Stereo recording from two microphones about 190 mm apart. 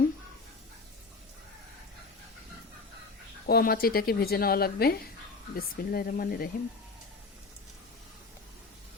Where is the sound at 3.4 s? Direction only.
55° left (ahead or behind).